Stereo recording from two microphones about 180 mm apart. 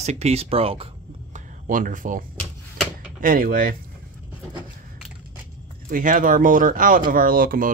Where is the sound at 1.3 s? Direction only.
50° right (ahead or behind).